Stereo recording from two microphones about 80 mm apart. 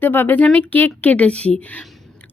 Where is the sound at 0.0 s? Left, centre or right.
Left.